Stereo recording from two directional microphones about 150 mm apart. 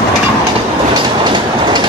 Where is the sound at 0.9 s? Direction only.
30° right (ahead or behind).